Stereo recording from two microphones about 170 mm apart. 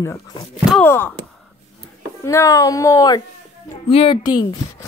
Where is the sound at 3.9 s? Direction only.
30° left (ahead or behind).